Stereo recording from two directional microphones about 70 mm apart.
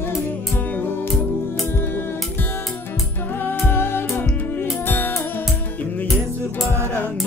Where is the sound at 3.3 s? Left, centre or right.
Left.